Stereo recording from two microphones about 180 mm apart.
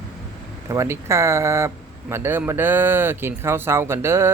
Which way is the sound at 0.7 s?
15° right (ahead or behind).